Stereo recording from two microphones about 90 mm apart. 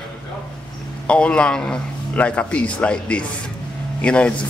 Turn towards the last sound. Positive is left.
turn(degrees=10)  # may be behind; listen again after turning